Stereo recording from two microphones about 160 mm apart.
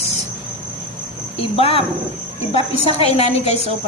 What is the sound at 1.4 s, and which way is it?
A woman's voice, 35° left (ahead or behind).